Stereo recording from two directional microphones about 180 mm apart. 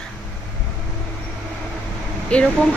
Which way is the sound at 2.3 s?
5° left (ahead or behind).